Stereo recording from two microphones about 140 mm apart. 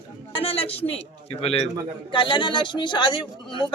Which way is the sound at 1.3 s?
45° left (ahead or behind).